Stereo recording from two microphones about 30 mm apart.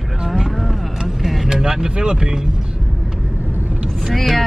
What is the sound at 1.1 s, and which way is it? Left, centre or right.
Vehicle, centre.